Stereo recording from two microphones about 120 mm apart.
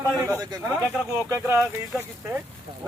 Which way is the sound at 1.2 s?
25° right (ahead or behind).